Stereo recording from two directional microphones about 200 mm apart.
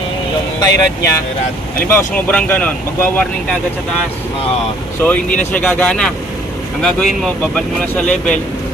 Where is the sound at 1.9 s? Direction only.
10° left (ahead or behind).